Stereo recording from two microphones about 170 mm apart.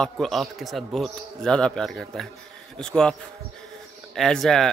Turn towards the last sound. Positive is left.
turn(degrees=0)  # may be behind; listen again after turning